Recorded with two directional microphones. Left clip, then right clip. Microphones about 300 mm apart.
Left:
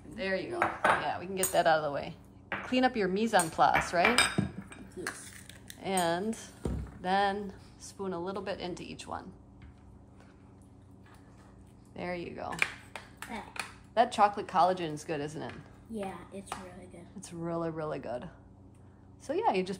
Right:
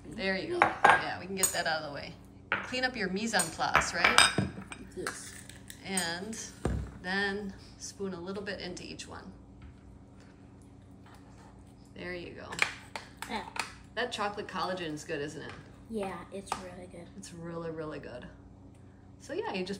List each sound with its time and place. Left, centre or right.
0.1 s dishes: centre
1.0 s a woman's voice: centre
4.1 s cutlery: right
5.0 s dishes: centre
5.8 s a woman's voice: centre
12.0 s a woman's voice: centre
12.5 s a sound: centre
13.9 s a woman's voice: centre
15.9 s a woman's voice: centre
17.2 s a woman's voice: centre